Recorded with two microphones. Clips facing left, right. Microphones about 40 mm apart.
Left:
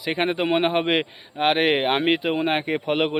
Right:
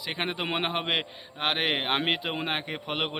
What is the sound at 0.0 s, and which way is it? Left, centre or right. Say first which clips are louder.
A man's voice: left 8 dB; centre.